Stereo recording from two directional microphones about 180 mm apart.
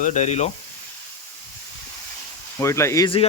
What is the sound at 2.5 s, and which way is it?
Speech, 15° left (ahead or behind).